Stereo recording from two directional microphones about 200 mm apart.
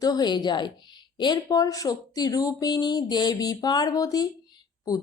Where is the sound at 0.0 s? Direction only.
20° left (ahead or behind).